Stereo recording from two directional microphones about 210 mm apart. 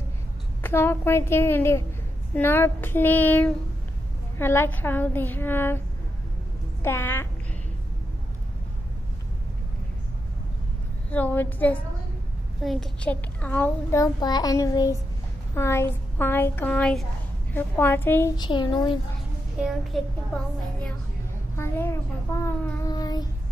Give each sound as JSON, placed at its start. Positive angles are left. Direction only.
{"t": 0.6, "sound": "a child's voice", "side_deg": 10}
{"t": 6.8, "sound": "a child's voice", "side_deg": 10}
{"t": 11.1, "sound": "a child's voice", "side_deg": 10}
{"t": 19.9, "sound": "a child's voice", "side_deg": 0}
{"t": 21.5, "sound": "a child's voice", "side_deg": 10}
{"t": 22.4, "sound": "child singing", "side_deg": 20}